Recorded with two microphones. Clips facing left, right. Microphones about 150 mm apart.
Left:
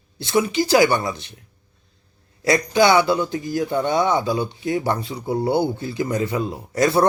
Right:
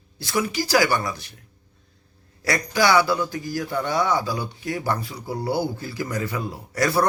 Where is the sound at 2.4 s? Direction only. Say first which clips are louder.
Left 5 dB; 20° left (ahead or behind).